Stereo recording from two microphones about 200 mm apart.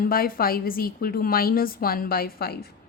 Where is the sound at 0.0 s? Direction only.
45° left (ahead or behind).